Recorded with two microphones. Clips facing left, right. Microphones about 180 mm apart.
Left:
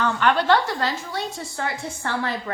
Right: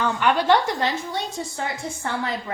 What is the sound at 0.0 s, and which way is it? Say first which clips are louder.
A woman's voice: even; 15° right (ahead or behind).